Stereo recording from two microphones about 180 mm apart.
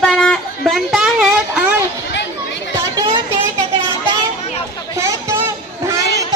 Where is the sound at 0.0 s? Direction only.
5° left (ahead or behind).